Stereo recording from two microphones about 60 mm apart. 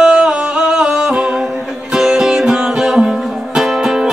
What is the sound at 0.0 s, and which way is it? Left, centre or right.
Music, centre.